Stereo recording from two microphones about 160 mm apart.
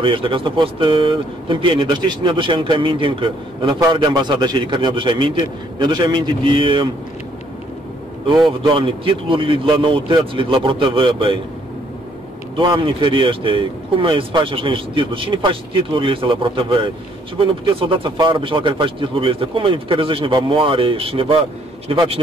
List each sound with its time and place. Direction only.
0.0 s a man's voice: 30° right (ahead or behind)
8.6 s speech: 30° right (ahead or behind)
12.5 s speech: 30° right (ahead or behind)